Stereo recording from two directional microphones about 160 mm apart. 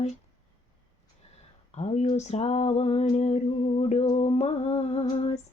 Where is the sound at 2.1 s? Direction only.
45° left (ahead or behind).